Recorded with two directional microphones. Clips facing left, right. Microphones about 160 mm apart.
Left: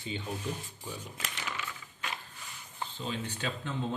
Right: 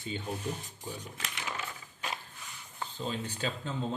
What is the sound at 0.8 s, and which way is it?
Speech, 15° right (ahead or behind).